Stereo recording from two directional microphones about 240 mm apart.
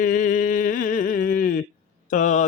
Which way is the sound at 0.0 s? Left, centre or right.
Left.